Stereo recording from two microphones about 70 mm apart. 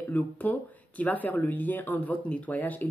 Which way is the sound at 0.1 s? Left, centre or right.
Left.